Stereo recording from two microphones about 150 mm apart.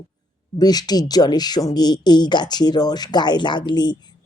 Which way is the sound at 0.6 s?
25° left (ahead or behind).